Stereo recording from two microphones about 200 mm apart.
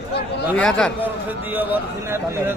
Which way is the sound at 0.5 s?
5° left (ahead or behind).